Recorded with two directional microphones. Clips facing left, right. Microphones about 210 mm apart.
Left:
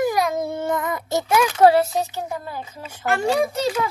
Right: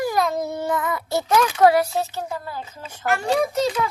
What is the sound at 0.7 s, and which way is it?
Child singing, 20° left (ahead or behind).